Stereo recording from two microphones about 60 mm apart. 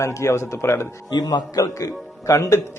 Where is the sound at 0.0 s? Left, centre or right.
Left.